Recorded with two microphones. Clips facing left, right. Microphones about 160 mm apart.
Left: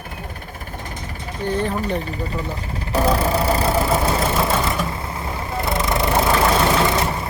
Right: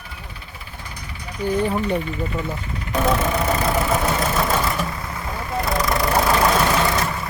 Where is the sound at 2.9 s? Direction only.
35° left (ahead or behind).